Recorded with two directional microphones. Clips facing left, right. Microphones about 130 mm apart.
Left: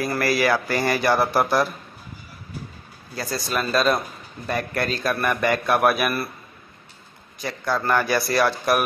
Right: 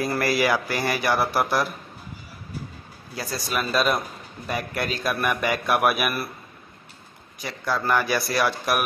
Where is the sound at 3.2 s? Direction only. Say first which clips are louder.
Left 2 dB; 5° right (ahead or behind).